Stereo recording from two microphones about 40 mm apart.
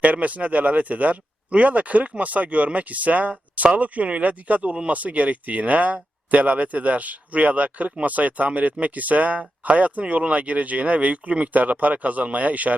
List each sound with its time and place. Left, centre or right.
0.0 s speech: right